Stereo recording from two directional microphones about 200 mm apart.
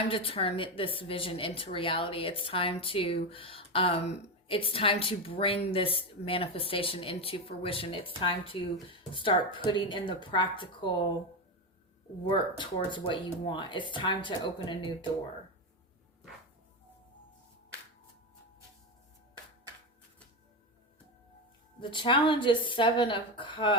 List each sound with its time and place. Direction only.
0.1 s a woman's voice: 30° left (ahead or behind)
12.3 s a woman's voice: 25° left (ahead or behind)
21.8 s a woman's voice: 25° left (ahead or behind)